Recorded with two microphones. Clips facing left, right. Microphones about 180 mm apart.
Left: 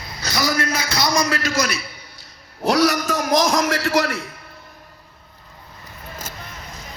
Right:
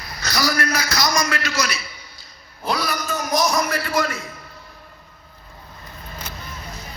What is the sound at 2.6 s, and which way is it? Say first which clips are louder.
A man's voice: left 7 dB; 75° left (ahead or behind).